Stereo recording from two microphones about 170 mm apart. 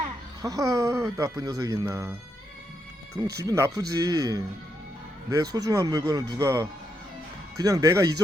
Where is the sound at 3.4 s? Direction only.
15° right (ahead or behind).